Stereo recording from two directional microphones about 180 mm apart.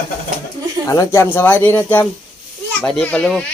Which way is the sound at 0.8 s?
15° left (ahead or behind).